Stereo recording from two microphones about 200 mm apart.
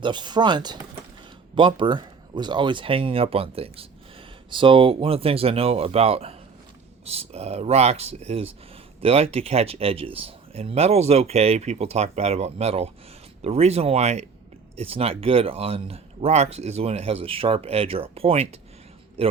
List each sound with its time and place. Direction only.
0.0 s a man's voice: 20° right (ahead or behind)